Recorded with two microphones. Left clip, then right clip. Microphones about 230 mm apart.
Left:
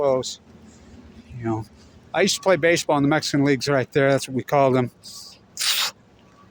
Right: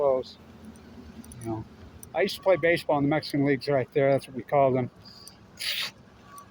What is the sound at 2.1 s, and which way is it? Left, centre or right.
Speech, left.